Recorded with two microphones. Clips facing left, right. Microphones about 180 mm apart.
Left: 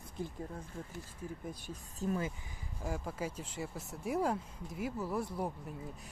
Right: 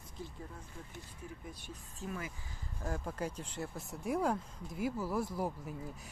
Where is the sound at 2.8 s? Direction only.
5° left (ahead or behind).